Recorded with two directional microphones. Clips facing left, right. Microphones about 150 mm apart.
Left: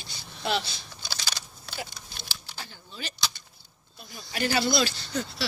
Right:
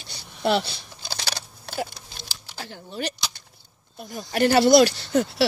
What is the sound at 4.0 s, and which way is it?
Speech, 50° right (ahead or behind).